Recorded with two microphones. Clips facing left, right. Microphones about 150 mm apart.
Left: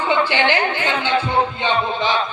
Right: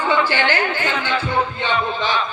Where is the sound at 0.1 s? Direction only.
20° left (ahead or behind).